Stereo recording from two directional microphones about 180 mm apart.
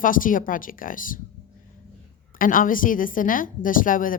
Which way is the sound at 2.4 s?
50° left (ahead or behind).